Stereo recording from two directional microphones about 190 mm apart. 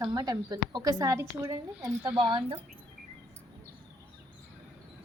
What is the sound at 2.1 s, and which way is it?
Speech, 25° right (ahead or behind).